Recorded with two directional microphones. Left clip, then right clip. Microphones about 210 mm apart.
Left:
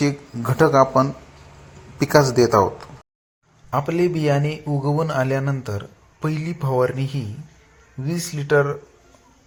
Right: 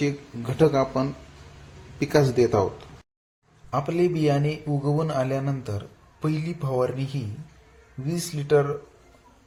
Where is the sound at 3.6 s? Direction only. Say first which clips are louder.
Left 3 dB; 10° left (ahead or behind).